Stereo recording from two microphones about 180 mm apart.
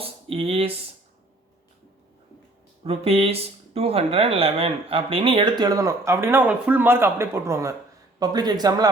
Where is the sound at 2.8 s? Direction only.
30° right (ahead or behind).